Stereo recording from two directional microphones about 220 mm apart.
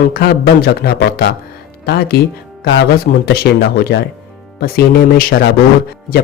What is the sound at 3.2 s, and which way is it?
Speech, 45° left (ahead or behind).